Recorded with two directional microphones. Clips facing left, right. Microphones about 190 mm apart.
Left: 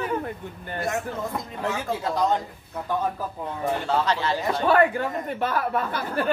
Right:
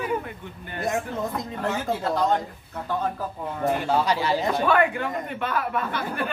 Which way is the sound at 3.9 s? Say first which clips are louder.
Even; 10° right (ahead or behind).